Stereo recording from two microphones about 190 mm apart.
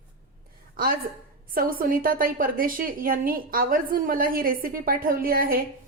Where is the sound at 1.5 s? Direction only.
50° right (ahead or behind).